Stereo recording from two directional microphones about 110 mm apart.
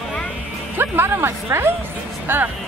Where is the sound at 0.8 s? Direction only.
20° right (ahead or behind).